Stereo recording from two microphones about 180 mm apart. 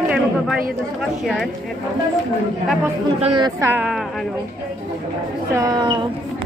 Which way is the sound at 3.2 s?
35° right (ahead or behind).